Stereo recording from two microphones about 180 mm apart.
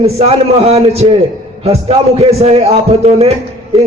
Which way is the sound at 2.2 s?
35° right (ahead or behind).